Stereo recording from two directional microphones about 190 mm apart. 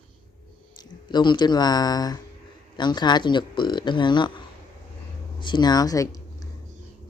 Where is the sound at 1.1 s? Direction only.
25° left (ahead or behind).